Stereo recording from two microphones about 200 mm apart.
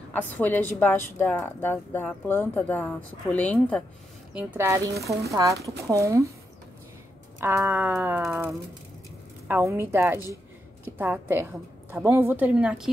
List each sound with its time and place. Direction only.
0.3 s speech: 10° left (ahead or behind)
4.3 s a woman's voice: 10° right (ahead or behind)
7.3 s a woman's voice: 10° right (ahead or behind)